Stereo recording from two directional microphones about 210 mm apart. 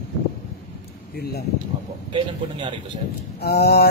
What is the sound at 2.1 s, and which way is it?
Speech, 20° right (ahead or behind).